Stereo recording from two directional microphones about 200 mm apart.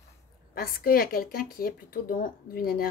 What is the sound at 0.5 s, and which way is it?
Speech, 45° left (ahead or behind).